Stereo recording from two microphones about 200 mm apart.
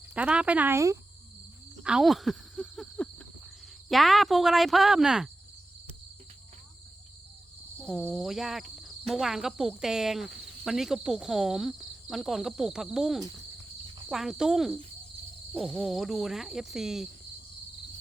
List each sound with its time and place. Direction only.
0.1 s speech: 5° right (ahead or behind)
1.8 s speech: 5° right (ahead or behind)
7.8 s speech: centre (ahead or behind)